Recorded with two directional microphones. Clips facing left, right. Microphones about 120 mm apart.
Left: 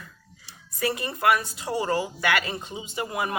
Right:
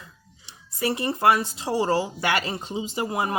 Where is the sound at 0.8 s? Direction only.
25° right (ahead or behind).